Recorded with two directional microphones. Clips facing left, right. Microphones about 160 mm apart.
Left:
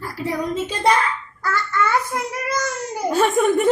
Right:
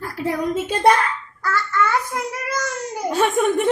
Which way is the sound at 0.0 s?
55° right (ahead or behind).